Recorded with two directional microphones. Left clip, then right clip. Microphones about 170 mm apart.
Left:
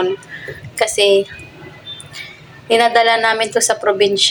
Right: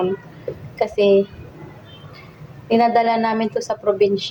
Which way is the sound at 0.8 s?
5° left (ahead or behind).